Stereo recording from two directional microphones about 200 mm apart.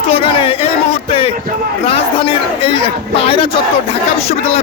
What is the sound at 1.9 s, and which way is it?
A man's voice, 25° left (ahead or behind).